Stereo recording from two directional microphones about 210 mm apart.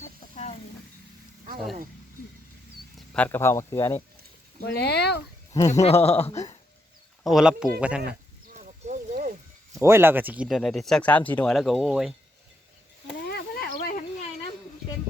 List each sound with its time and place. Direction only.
3.1 s speech: 10° left (ahead or behind)
4.6 s speech: 50° left (ahead or behind)
5.5 s speech: 15° left (ahead or behind)
5.8 s speech: 30° left (ahead or behind)
7.3 s speech: centre (ahead or behind)
8.5 s a sound: 35° right (ahead or behind)
9.7 s speech: 10° right (ahead or behind)
13.2 s snake: 50° left (ahead or behind)